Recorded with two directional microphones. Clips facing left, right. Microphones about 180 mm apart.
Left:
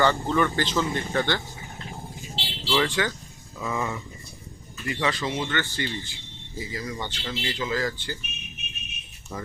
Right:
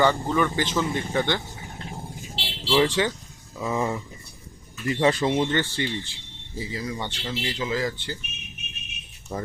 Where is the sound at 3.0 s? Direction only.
25° right (ahead or behind).